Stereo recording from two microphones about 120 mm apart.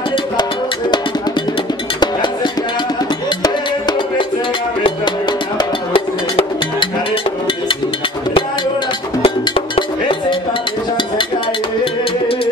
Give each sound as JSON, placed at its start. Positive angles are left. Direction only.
{"t": 3.3, "sound": "music", "side_deg": 40}
{"t": 5.9, "sound": "music", "side_deg": 50}
{"t": 9.2, "sound": "cowbell", "side_deg": 45}
{"t": 11.8, "sound": "music", "side_deg": 50}